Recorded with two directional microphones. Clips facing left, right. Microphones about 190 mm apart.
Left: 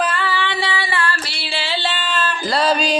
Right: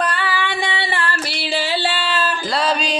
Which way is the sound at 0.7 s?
20° right (ahead or behind).